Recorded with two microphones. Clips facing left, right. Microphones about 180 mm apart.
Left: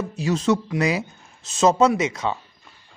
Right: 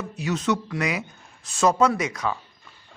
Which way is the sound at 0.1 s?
30° left (ahead or behind).